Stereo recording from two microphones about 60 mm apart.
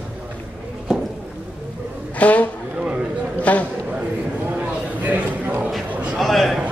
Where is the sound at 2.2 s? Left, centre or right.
Left.